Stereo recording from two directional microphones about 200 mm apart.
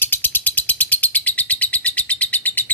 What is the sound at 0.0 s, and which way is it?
Bird, 10° left (ahead or behind).